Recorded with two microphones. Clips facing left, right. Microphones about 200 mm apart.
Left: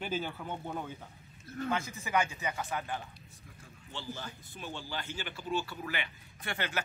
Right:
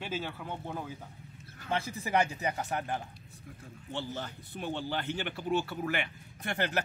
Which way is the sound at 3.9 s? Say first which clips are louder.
Right 4 dB; 55° right (ahead or behind).